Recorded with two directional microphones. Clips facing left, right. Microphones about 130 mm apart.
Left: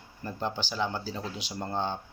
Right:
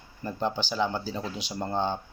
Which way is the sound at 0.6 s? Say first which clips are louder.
Right 3 dB; 5° left (ahead or behind).